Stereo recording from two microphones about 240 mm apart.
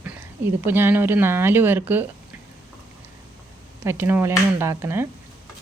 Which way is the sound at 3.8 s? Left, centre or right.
Centre.